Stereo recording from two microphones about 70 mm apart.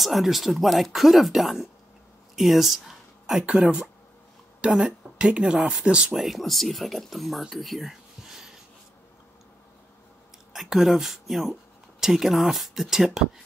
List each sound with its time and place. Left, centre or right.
0.0 s speech: centre
3.4 s speech: centre
6.1 s speech: centre
10.5 s speech: centre